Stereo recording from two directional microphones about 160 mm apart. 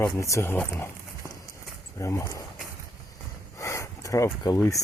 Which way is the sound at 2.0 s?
20° left (ahead or behind).